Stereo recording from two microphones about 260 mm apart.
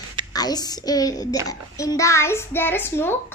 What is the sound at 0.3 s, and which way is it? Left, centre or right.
A child's voice, centre.